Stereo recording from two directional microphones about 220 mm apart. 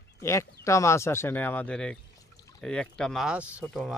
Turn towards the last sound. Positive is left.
turn(degrees=0)  # may be behind; listen again after turning